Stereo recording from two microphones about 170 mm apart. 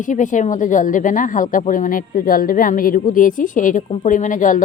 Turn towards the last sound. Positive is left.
turn(degrees=50)  # may be behind; listen again after turning